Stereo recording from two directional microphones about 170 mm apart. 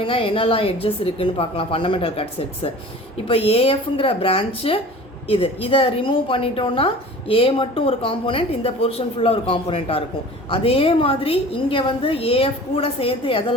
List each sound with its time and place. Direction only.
0.0 s a woman's voice: 30° left (ahead or behind)